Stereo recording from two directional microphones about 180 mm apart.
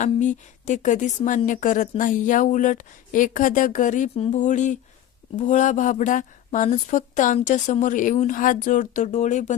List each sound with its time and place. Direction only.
0.0 s speech: 45° left (ahead or behind)